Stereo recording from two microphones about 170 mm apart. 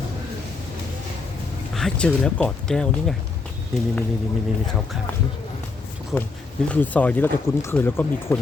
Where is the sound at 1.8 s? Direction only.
5° left (ahead or behind).